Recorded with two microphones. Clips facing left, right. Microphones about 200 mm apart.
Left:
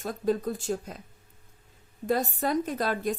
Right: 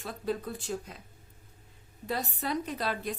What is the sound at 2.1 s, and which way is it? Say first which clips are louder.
A woman's voice: left 6 dB; 45° left (ahead or behind).